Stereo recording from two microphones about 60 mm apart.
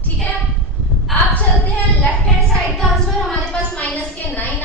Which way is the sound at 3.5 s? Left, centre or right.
Left.